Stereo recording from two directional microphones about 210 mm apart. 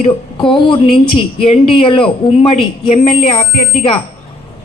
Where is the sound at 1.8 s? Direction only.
25° left (ahead or behind).